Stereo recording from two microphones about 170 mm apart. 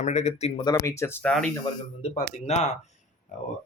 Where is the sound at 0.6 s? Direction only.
20° left (ahead or behind).